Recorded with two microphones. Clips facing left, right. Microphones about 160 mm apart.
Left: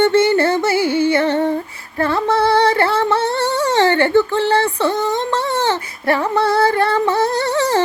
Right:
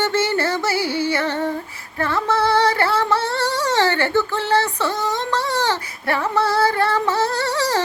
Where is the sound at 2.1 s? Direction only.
30° left (ahead or behind).